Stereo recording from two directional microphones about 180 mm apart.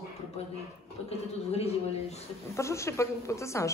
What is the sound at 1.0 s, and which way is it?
A man's voice, 35° left (ahead or behind).